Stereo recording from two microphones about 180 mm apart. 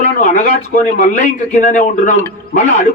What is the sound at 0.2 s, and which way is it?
A man's voice, 45° left (ahead or behind).